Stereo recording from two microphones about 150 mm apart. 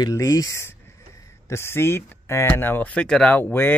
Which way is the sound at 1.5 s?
15° left (ahead or behind).